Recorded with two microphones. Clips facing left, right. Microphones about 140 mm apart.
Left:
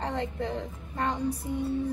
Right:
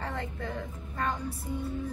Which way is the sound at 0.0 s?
20° left (ahead or behind).